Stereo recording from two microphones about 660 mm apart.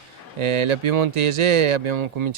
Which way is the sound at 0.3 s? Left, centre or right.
Right.